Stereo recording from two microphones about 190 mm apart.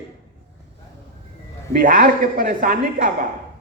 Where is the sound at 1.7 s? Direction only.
45° right (ahead or behind).